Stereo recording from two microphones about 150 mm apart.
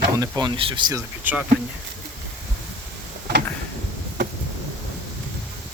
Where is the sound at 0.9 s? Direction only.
10° right (ahead or behind).